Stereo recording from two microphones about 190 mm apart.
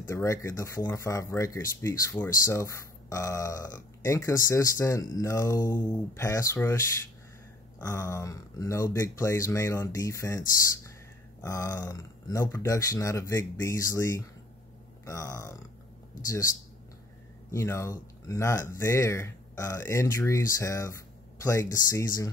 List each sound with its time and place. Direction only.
0.1 s speech: 15° left (ahead or behind)
7.8 s speech: 15° left (ahead or behind)
11.4 s speech: 15° left (ahead or behind)
17.5 s speech: 15° left (ahead or behind)